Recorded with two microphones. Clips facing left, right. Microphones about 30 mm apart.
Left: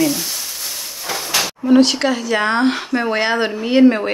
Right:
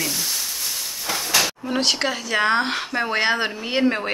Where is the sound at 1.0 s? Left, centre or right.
Centre.